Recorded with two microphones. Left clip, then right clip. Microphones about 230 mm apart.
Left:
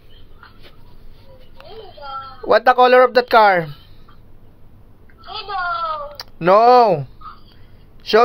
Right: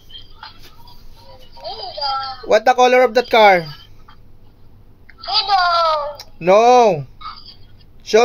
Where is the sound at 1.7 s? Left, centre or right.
Right.